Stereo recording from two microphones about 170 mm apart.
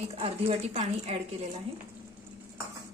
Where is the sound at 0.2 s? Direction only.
35° right (ahead or behind).